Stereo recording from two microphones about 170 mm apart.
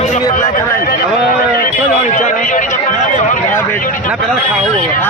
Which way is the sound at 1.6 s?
50° left (ahead or behind).